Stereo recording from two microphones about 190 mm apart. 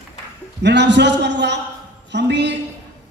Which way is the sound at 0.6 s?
65° right (ahead or behind).